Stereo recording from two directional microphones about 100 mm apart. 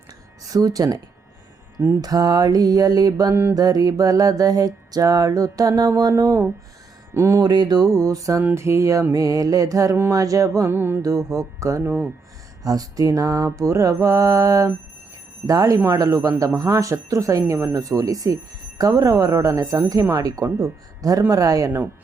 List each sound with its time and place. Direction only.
0.5 s speech: 40° right (ahead or behind)
7.4 s speech: 45° right (ahead or behind)
10.7 s speech: 20° right (ahead or behind)
11.0 s speech: 35° right (ahead or behind)
11.8 s speech: 20° right (ahead or behind)
12.6 s speech: 35° right (ahead or behind)